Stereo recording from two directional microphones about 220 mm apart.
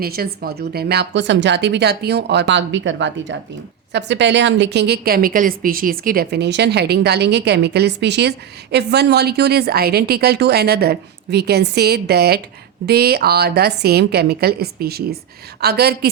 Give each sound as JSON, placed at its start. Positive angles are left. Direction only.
{"t": 0.0, "sound": "a woman's voice", "side_deg": -45}